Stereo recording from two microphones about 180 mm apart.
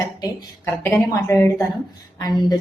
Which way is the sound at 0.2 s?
15° left (ahead or behind).